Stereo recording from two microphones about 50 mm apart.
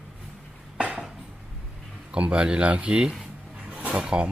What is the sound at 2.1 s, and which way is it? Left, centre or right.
Speech, right.